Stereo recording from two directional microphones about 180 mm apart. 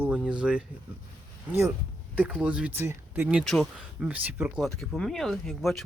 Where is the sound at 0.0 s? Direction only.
5° right (ahead or behind).